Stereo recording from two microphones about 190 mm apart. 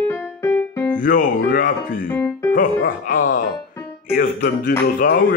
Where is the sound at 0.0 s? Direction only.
10° left (ahead or behind).